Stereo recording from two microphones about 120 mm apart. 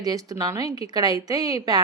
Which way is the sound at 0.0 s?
30° right (ahead or behind).